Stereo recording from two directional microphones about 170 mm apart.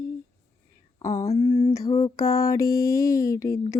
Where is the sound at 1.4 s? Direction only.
35° left (ahead or behind).